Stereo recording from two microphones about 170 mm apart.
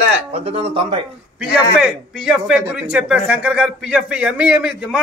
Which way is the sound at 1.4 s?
5° right (ahead or behind).